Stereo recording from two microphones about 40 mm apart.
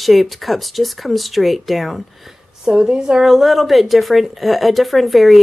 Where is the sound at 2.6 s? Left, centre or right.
Centre.